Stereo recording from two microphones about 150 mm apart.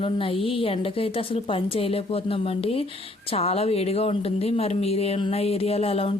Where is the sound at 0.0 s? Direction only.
35° left (ahead or behind).